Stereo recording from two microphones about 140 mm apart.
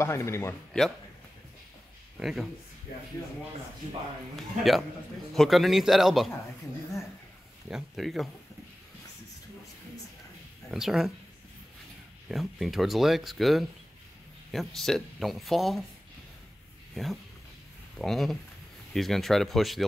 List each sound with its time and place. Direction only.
0.0 s speech: 20° left (ahead or behind)
2.1 s speech: centre (ahead or behind)
4.4 s speech: centre (ahead or behind)
7.7 s speech: centre (ahead or behind)
10.7 s speech: centre (ahead or behind)
12.3 s speech: centre (ahead or behind)
16.9 s speech: centre (ahead or behind)